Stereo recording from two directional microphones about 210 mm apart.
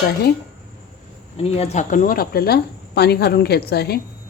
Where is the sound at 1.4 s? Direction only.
30° left (ahead or behind); by 4.0 s 50° left (ahead or behind).